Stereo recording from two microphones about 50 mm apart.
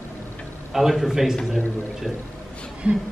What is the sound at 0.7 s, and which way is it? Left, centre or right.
Speech, centre.